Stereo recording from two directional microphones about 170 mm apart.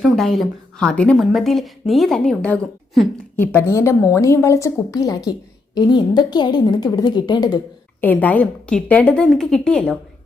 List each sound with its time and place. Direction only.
0.0 s a woman's voice: centre (ahead or behind); by 7.6 s 25° left (ahead or behind)
8.0 s a woman's voice: 10° left (ahead or behind)